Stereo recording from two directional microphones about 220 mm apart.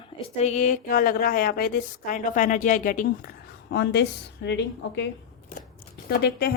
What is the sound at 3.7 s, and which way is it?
A woman's voice, 50° left (ahead or behind).